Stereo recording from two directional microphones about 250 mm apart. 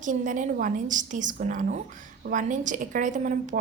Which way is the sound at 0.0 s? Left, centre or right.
Right.